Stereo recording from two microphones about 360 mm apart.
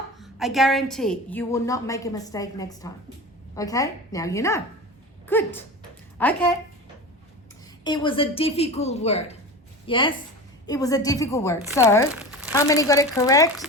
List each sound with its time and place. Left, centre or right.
0.2 s a woman's voice: centre
5.2 s a sound: centre
6.1 s speech: centre
7.9 s a woman's voice: centre
12.1 s crumpling: centre
12.5 s a woman's voice: centre